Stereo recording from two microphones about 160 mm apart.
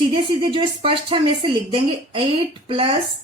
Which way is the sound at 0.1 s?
35° right (ahead or behind).